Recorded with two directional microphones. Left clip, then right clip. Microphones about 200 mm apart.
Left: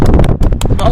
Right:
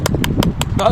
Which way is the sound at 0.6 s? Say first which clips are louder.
Left 5 dB; centre (ahead or behind).